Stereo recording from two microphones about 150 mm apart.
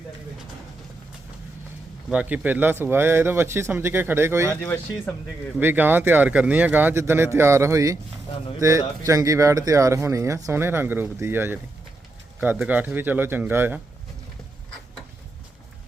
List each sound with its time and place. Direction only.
2.0 s speech: 10° right (ahead or behind)
4.6 s speech: 15° left (ahead or behind)
5.5 s speech: 10° right (ahead or behind)
9.0 s speech: 20° right (ahead or behind)